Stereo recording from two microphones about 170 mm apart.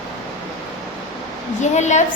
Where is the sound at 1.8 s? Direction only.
45° left (ahead or behind).